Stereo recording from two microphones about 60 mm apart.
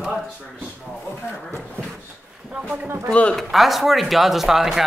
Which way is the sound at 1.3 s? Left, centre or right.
Left.